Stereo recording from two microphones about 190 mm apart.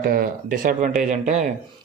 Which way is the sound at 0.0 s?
50° right (ahead or behind).